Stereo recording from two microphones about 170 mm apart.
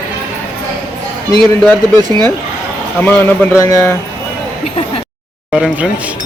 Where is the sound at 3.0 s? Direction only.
10° left (ahead or behind).